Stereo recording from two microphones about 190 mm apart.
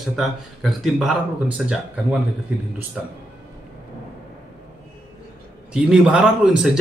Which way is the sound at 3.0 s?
5° right (ahead or behind).